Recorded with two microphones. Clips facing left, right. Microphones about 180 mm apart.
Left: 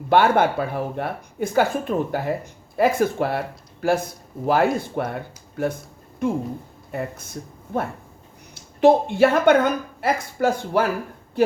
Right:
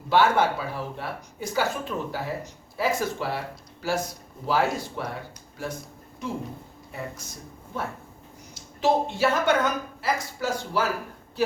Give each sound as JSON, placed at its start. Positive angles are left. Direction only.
{"t": 0.1, "sound": "speech", "side_deg": 55}
{"t": 6.2, "sound": "speech", "side_deg": 55}